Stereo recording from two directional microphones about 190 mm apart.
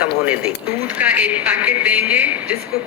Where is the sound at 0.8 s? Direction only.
10° right (ahead or behind).